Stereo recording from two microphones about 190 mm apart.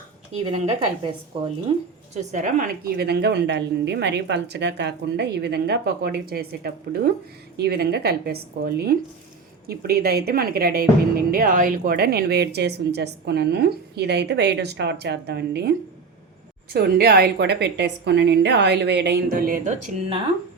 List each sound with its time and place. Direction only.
0.5 s a woman's voice: 30° right (ahead or behind)
2.3 s a woman's voice: 40° right (ahead or behind); by 15.7 s 60° right (ahead or behind)
16.7 s a woman's voice: 55° right (ahead or behind); by 20.2 s 35° right (ahead or behind)